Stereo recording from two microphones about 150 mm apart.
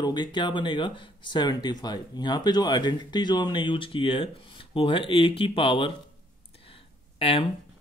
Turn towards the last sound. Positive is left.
turn(degrees=40)  # may be behind; listen again after turning